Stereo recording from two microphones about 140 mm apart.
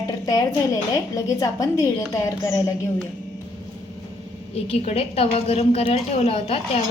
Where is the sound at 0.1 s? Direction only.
25° left (ahead or behind).